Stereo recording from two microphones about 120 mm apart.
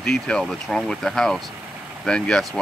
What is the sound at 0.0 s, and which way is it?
Speech, 5° left (ahead or behind).